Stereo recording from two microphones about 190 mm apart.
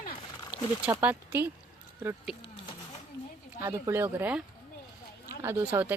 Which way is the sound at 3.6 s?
15° right (ahead or behind).